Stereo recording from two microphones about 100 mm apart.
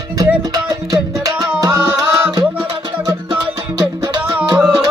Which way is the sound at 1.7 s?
25° right (ahead or behind).